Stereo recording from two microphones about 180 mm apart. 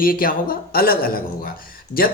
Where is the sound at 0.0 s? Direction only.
55° left (ahead or behind).